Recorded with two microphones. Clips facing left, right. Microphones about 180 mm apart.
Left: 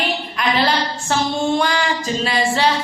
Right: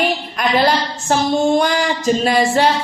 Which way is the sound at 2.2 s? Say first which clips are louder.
Right 3 dB; 50° right (ahead or behind).